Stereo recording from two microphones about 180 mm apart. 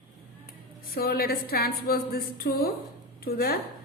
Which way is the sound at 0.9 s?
55° left (ahead or behind).